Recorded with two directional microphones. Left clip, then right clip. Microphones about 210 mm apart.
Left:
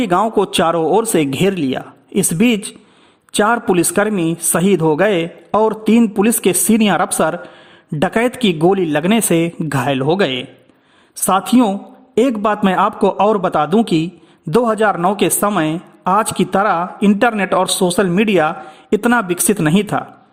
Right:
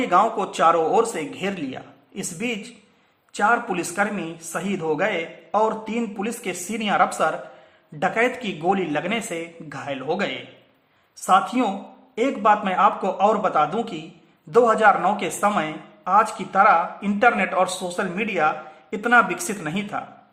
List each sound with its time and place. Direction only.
0.0 s a woman's voice: 50° left (ahead or behind)